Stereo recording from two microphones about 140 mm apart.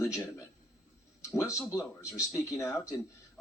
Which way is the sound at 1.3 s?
20° left (ahead or behind).